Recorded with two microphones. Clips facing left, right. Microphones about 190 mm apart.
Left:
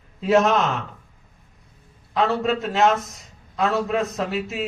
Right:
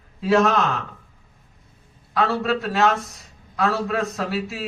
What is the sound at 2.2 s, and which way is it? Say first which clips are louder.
A man's voice: left 1 dB; 20° left (ahead or behind).